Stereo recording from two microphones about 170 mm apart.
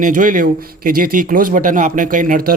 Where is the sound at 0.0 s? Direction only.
50° right (ahead or behind).